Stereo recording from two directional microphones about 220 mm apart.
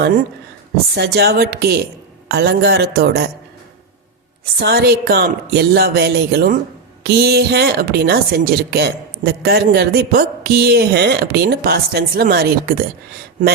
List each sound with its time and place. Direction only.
0.9 s a woman's voice: 45° right (ahead or behind)
4.6 s a woman's voice: 45° right (ahead or behind)